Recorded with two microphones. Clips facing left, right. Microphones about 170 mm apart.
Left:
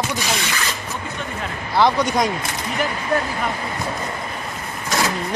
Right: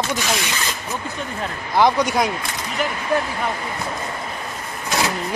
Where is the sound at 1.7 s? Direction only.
10° right (ahead or behind).